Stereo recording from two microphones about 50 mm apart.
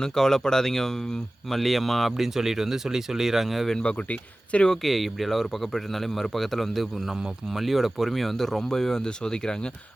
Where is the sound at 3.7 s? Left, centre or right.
Centre.